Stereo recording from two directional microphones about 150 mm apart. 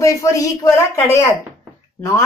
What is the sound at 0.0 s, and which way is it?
A woman's voice, 20° left (ahead or behind).